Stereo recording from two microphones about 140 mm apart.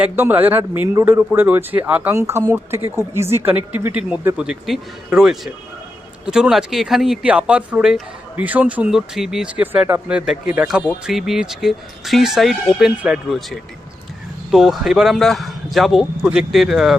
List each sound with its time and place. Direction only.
0.0 s speech: 15° right (ahead or behind)